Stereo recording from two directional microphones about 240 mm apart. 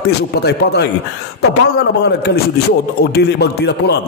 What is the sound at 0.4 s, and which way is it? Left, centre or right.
Speech, left.